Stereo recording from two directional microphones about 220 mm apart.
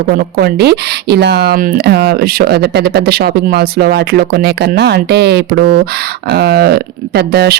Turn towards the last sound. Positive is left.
turn(degrees=-45)  # may be behind; listen again after turning